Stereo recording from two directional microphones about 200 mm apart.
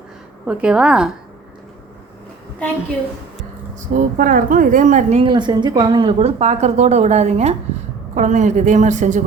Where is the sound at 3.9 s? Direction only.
40° right (ahead or behind).